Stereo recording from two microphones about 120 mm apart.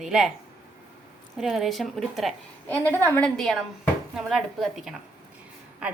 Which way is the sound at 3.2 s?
5° left (ahead or behind).